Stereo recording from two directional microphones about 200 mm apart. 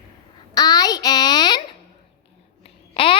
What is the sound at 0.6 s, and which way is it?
A child's voice, 20° left (ahead or behind).